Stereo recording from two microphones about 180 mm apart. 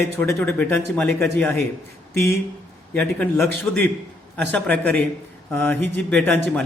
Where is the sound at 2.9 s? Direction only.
10° left (ahead or behind).